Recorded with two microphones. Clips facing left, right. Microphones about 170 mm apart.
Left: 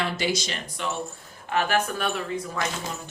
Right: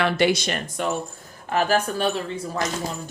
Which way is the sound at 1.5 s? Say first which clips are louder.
Right 3 dB; 40° right (ahead or behind).